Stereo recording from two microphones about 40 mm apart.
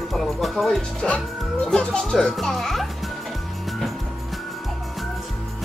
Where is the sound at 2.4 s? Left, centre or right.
Centre.